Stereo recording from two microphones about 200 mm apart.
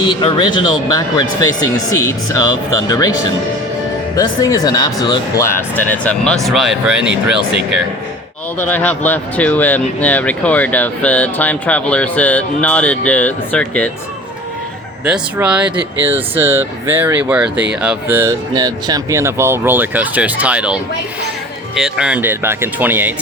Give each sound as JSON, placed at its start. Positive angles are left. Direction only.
{"t": 0.0, "sound": "speech", "side_deg": 25}
{"t": 8.5, "sound": "speech", "side_deg": 10}
{"t": 15.0, "sound": "speech", "side_deg": -5}
{"t": 21.8, "sound": "speech", "side_deg": -5}